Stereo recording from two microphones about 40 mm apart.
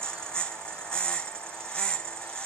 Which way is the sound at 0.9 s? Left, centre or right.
Left.